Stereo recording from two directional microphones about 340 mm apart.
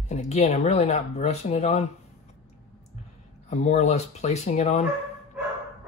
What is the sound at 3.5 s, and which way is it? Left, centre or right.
Speech, centre.